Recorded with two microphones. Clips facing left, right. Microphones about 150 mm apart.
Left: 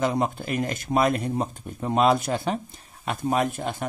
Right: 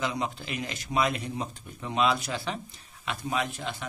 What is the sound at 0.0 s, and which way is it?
Speech, 50° left (ahead or behind).